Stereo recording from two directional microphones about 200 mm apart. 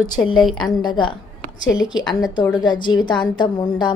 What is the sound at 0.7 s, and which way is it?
A woman's voice, 25° left (ahead or behind).